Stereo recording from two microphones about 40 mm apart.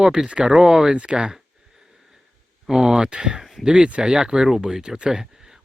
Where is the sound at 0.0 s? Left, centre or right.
Centre.